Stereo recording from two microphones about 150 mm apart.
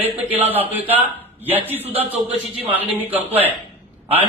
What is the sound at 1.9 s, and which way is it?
Speech, 40° right (ahead or behind).